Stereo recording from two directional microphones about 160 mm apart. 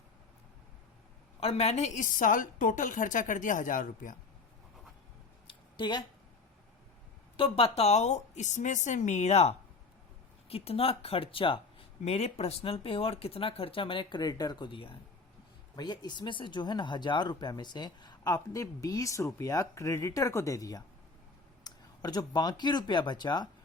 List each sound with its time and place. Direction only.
1.4 s a woman's voice: 40° left (ahead or behind); by 4.2 s 55° left (ahead or behind)
5.7 s speech: 30° left (ahead or behind)
7.3 s a woman's voice: 35° left (ahead or behind)